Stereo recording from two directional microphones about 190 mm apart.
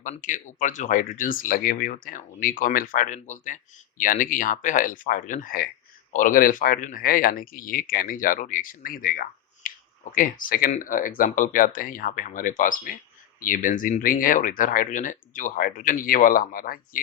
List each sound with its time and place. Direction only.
0.0 s speech: 40° left (ahead or behind)